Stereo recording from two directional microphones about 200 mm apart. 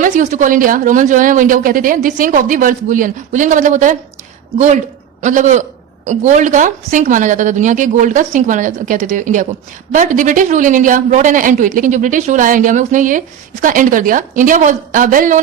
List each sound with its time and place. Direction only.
0.0 s speech: 35° right (ahead or behind)